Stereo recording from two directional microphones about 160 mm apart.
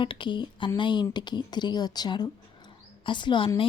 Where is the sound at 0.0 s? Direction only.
30° left (ahead or behind).